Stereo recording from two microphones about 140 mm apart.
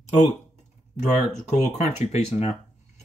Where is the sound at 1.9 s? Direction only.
55° left (ahead or behind).